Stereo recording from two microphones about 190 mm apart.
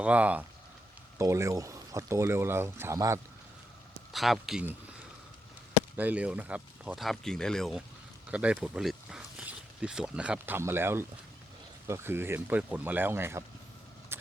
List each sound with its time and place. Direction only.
0.0 s speech: 5° right (ahead or behind)
4.1 s speech: centre (ahead or behind)
6.0 s speech: 5° right (ahead or behind)
14.1 s keys jangling: 10° right (ahead or behind)